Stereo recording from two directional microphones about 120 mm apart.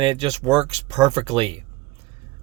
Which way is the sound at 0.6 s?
60° right (ahead or behind).